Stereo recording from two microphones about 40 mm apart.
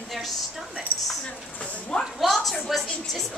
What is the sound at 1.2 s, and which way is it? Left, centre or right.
Speech, left.